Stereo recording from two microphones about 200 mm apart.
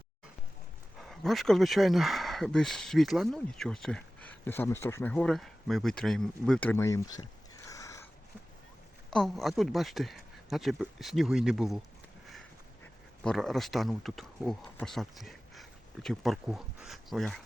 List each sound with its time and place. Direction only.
0.9 s speech: centre (ahead or behind)
7.7 s sniff: 15° left (ahead or behind)
9.0 s speech: centre (ahead or behind)
13.2 s speech: centre (ahead or behind)